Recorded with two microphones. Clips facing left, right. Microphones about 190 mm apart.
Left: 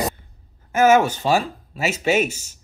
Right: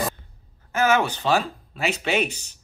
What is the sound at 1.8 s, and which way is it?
Speech, 45° left (ahead or behind).